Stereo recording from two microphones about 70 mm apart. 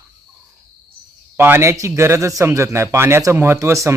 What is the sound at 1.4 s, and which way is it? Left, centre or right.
A man's voice, right.